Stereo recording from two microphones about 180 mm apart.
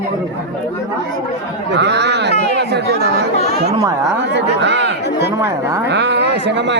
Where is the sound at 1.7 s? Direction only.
75° right (ahead or behind).